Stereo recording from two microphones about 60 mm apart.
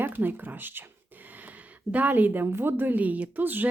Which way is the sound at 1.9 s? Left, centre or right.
Right.